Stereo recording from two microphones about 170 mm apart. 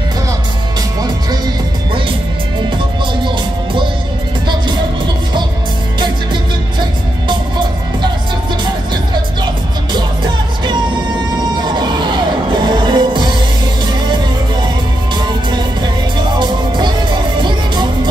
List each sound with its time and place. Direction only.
3.3 s music: 30° right (ahead or behind)
7.2 s music: 25° right (ahead or behind)
11.5 s vehicle: 25° right (ahead or behind)
12.6 s music: 25° right (ahead or behind)
15.1 s music: 25° right (ahead or behind)